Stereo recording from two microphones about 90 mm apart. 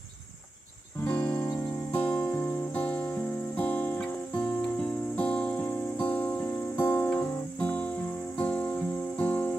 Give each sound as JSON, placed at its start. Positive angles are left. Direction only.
{"t": 1.0, "sound": "music", "side_deg": 15}